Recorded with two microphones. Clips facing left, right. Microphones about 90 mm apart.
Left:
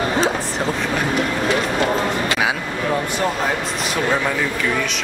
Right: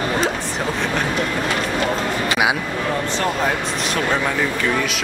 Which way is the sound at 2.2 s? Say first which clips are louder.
Right 1 dB; 15° right (ahead or behind).